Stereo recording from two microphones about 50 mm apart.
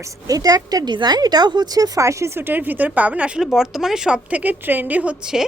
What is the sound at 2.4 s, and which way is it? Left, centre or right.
Speech, right.